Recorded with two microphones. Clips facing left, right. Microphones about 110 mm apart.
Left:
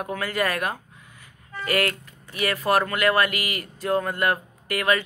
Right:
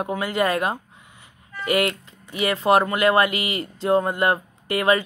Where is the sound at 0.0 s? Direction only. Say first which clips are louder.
Right 3 dB; 20° right (ahead or behind).